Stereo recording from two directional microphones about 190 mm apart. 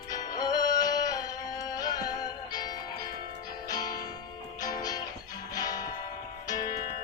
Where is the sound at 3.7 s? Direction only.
20° left (ahead or behind).